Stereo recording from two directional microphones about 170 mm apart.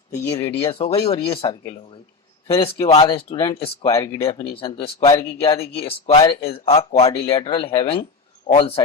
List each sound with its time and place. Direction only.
0.1 s speech: 15° left (ahead or behind)
0.7 s speech: 35° left (ahead or behind)
3.8 s speech: 20° left (ahead or behind)
4.2 s speech: 30° left (ahead or behind)